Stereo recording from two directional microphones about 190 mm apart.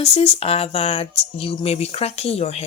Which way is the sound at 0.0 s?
30° left (ahead or behind).